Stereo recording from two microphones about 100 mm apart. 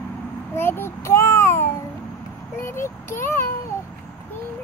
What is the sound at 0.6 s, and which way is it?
Child singing, 25° left (ahead or behind).